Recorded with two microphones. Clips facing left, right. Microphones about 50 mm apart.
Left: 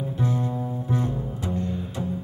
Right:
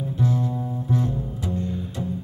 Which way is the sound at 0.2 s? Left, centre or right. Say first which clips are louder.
Right 2 dB; left.